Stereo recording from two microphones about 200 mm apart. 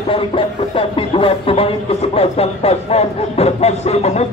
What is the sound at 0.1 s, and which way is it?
Speech, 25° left (ahead or behind).